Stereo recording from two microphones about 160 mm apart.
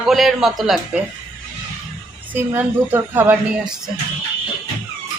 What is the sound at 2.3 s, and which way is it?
A woman's voice, 15° right (ahead or behind).